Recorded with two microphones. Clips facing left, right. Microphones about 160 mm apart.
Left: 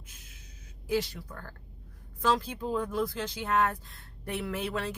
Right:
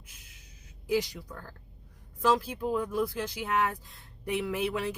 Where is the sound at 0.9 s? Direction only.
15° right (ahead or behind).